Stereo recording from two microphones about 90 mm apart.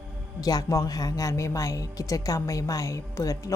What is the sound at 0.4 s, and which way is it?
A woman's voice, 40° left (ahead or behind).